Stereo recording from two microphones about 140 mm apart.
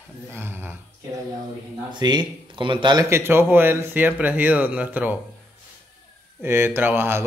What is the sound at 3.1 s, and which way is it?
Speech, 15° right (ahead or behind).